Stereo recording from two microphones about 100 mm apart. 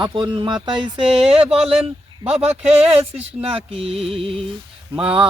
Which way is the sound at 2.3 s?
90° right.